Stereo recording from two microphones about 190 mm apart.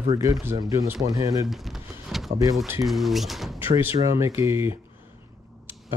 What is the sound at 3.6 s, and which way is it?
Speech, 10° right (ahead or behind).